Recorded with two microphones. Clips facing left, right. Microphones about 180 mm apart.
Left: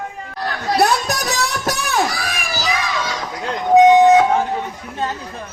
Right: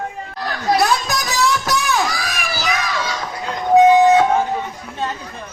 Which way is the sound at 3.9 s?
20° left (ahead or behind).